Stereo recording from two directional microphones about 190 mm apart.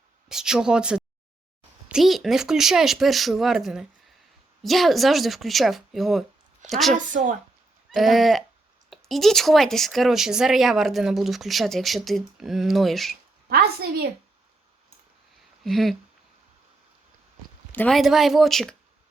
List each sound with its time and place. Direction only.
0.3 s speech: 5° right (ahead or behind)
6.9 s a woman's voice: 45° right (ahead or behind)
7.9 s speech: centre (ahead or behind)
13.5 s a woman's voice: 55° right (ahead or behind)
15.6 s speech: centre (ahead or behind)
17.7 s speech: 5° left (ahead or behind)